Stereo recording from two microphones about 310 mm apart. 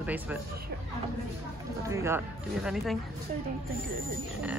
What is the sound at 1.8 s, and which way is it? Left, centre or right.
Speech, centre.